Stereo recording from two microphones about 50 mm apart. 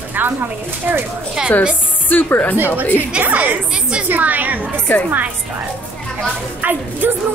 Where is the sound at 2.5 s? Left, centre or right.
Right.